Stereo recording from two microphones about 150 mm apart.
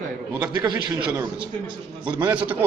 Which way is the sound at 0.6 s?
30° right (ahead or behind).